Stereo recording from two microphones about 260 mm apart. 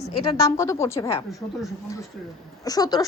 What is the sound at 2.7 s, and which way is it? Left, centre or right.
Speech, centre.